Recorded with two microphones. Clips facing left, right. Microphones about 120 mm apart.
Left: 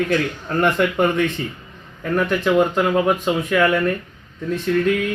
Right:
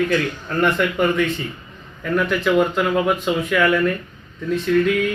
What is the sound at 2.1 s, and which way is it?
Speech, 30° left (ahead or behind).